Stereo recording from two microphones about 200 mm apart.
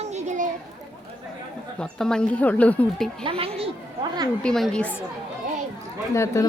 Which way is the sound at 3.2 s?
30° right (ahead or behind).